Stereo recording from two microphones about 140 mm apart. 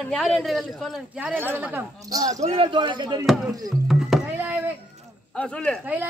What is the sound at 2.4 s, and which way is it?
Speech, 40° right (ahead or behind).